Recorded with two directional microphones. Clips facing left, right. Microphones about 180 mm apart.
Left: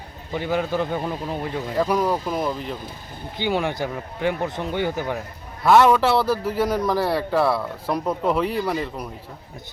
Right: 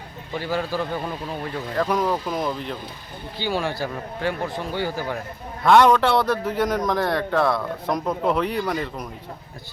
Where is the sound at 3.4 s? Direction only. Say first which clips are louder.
Left 2 dB; 20° left (ahead or behind).